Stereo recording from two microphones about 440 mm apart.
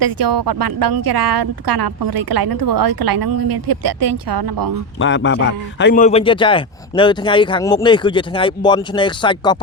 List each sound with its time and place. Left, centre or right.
0.0 s a woman's voice: right
4.9 s a man's voice: left